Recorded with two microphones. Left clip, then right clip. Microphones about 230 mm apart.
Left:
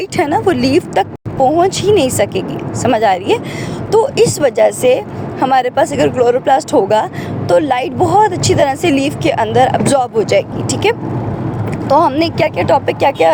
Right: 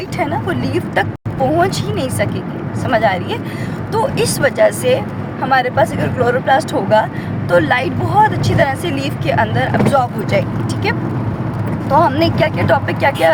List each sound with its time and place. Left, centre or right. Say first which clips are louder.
0.2 s a woman's voice: left 6 dB; left